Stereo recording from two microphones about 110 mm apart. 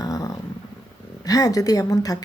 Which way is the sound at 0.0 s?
35° left (ahead or behind).